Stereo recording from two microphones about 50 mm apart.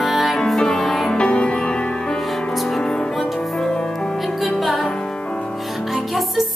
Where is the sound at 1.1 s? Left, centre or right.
Centre.